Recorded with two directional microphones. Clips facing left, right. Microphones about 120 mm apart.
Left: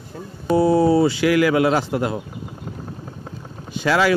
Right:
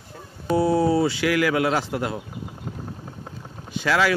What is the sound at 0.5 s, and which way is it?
Speech, 35° left (ahead or behind).